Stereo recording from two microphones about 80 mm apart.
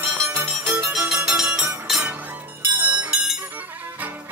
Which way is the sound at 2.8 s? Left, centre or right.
Centre.